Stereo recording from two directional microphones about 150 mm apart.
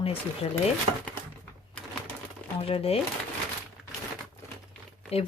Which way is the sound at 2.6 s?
40° left (ahead or behind).